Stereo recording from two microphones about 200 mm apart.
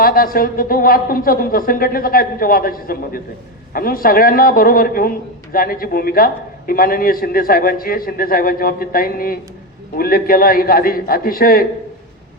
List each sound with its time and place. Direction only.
0.0 s a man's voice: 45° left (ahead or behind)